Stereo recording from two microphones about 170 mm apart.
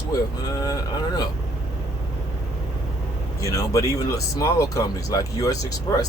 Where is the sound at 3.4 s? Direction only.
20° left (ahead or behind).